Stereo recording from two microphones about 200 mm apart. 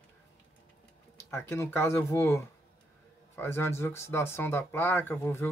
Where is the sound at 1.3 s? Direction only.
15° left (ahead or behind).